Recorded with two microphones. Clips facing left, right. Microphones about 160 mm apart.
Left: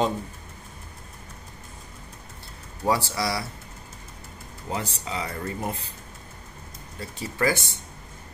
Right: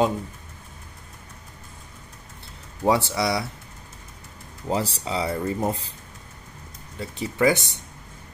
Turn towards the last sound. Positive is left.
turn(degrees=-20)  # may be behind; listen again after turning